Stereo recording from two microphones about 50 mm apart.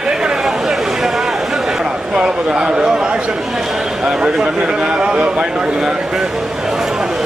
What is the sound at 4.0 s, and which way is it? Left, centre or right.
Speech, centre.